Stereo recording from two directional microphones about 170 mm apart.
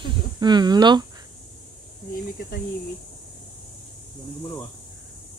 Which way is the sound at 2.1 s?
60° left (ahead or behind).